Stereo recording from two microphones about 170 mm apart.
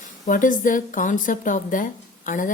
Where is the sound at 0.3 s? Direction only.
50° left (ahead or behind).